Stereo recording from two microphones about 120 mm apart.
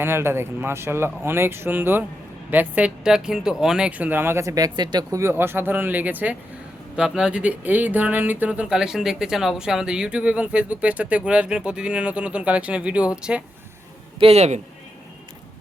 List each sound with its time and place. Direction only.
0.0 s speech: 20° right (ahead or behind); by 5.2 s 35° right (ahead or behind)
5.2 s speech: 20° right (ahead or behind)
14.2 s a man's voice: 60° right (ahead or behind)